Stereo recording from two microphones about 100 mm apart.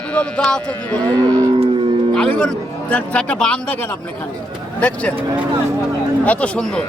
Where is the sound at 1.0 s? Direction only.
40° right (ahead or behind).